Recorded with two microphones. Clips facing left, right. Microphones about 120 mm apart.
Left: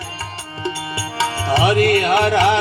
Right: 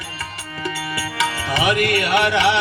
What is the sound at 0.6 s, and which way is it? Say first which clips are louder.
Music: left 1 dB; 30° left (ahead or behind).